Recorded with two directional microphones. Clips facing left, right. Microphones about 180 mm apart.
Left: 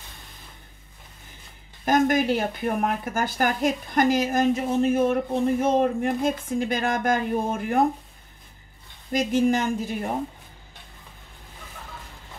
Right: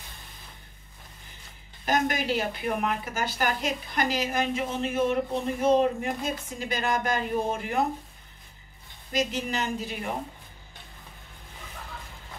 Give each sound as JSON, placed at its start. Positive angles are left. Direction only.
{"t": 1.9, "sound": "a woman's voice", "side_deg": 50}
{"t": 9.1, "sound": "a woman's voice", "side_deg": 50}